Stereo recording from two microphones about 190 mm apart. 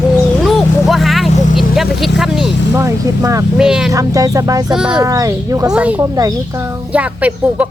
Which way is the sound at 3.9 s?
20° right (ahead or behind).